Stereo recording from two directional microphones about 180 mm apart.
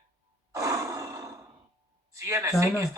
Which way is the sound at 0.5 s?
20° right (ahead or behind).